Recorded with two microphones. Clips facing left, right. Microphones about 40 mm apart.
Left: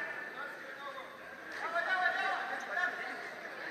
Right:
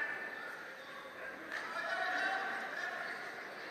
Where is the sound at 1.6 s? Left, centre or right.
Left.